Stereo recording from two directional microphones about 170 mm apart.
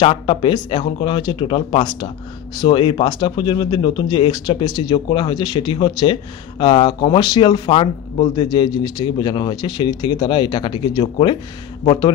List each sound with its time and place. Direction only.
0.0 s speech: 35° left (ahead or behind)